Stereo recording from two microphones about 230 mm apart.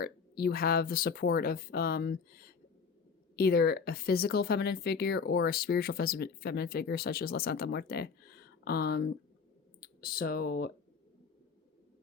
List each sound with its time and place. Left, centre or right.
0.0 s speech: left